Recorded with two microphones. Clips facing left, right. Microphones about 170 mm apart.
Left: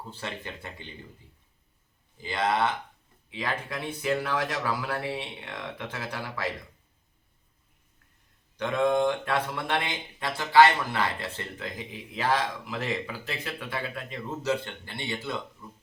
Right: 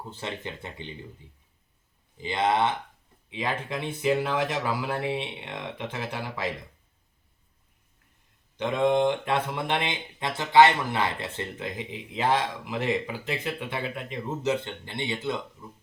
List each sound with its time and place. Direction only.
0.1 s speech: 20° right (ahead or behind)
2.2 s speech: 20° right (ahead or behind)
8.5 s speech: 20° right (ahead or behind)